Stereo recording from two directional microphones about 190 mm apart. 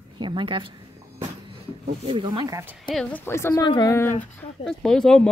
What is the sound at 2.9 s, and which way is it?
Speech, 5° left (ahead or behind).